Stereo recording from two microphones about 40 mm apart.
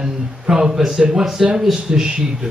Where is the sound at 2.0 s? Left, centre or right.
Centre.